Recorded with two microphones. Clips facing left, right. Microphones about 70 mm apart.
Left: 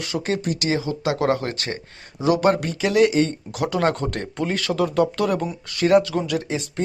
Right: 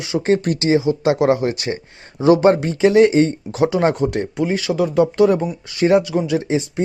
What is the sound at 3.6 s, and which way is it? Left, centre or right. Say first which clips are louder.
Speech: right 5 dB; centre.